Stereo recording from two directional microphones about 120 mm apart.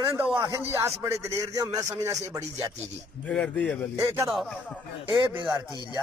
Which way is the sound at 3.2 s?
10° left (ahead or behind).